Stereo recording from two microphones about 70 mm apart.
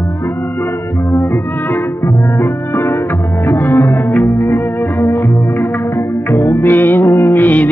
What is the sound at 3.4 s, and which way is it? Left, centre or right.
Music, left.